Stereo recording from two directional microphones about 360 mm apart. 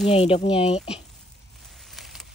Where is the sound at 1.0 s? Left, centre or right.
Centre.